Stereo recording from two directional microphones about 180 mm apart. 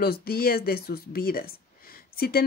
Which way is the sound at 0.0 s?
55° left (ahead or behind).